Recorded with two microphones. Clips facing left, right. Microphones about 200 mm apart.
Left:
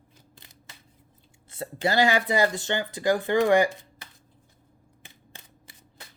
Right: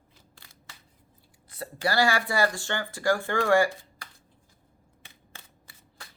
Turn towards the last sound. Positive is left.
turn(degrees=20)  # may be behind; listen again after turning